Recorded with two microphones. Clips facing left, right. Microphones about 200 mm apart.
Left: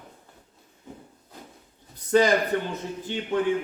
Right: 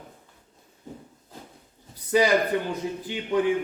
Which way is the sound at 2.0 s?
10° right (ahead or behind).